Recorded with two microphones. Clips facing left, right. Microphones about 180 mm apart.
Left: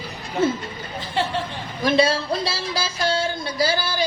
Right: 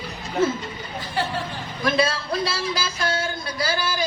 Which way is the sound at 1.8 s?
30° left (ahead or behind).